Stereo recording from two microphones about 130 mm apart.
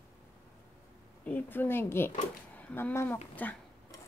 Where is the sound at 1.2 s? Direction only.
15° left (ahead or behind).